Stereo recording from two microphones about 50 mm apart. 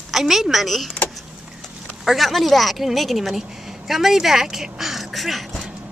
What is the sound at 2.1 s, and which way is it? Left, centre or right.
A woman's voice, centre.